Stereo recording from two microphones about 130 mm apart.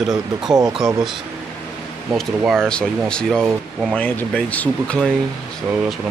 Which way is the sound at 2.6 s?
5° left (ahead or behind).